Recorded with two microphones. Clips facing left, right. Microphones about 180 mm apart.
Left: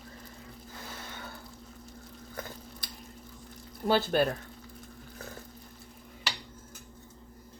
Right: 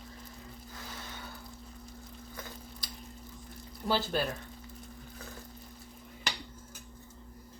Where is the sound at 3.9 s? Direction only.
55° left (ahead or behind).